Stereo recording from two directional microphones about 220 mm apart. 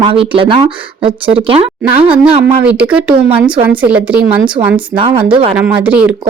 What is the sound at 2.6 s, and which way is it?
Speech, 5° right (ahead or behind).